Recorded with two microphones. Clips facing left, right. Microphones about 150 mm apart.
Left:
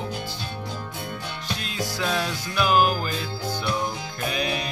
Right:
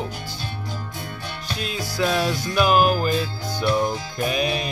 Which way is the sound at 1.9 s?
5° right (ahead or behind).